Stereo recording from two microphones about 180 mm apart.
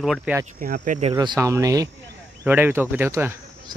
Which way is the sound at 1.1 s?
20° right (ahead or behind).